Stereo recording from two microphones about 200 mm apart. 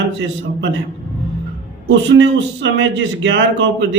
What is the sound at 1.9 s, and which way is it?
Speech, 65° right (ahead or behind).